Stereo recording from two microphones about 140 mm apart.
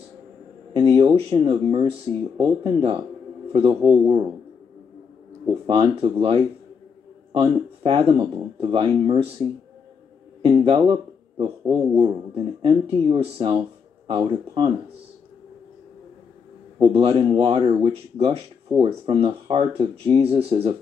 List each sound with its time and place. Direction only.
0.7 s speech: 35° right (ahead or behind)
5.7 s speech: 40° right (ahead or behind)
10.4 s speech: 40° right (ahead or behind)
16.9 s speech: 40° right (ahead or behind)